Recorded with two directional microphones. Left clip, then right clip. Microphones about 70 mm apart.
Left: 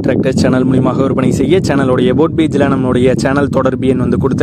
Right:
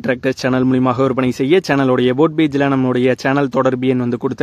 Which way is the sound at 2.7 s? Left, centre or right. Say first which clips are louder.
Left 3 dB; left.